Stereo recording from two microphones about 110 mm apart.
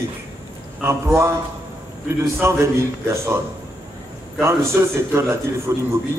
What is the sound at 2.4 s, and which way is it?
A man's voice, 25° right (ahead or behind).